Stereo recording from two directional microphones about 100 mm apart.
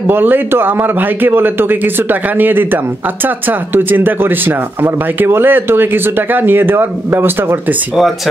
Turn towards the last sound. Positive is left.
turn(degrees=-20)  # may be behind; listen again after turning